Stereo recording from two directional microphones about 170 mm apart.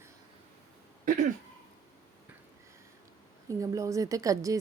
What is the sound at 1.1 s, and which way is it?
Throat clearing, 50° right (ahead or behind).